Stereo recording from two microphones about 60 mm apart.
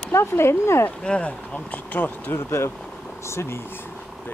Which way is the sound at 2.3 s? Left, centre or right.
Left.